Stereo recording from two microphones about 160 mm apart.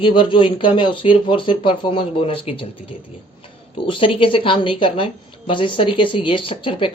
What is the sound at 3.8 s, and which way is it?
Speech, 35° left (ahead or behind).